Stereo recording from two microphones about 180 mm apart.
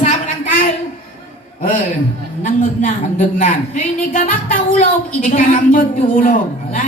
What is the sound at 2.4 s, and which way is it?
Speech, 45° left (ahead or behind).